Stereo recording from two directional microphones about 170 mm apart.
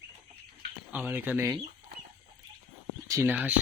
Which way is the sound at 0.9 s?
10° right (ahead or behind).